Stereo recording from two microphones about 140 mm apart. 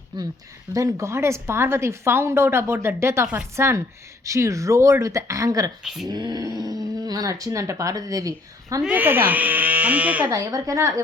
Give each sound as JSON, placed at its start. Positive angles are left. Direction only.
{"t": 0.1, "sound": "speech", "side_deg": -30}
{"t": 5.8, "sound": "speech", "side_deg": 0}
{"t": 6.1, "sound": "speech", "side_deg": -30}
{"t": 8.8, "sound": "speech", "side_deg": -10}
{"t": 10.2, "sound": "speech", "side_deg": -25}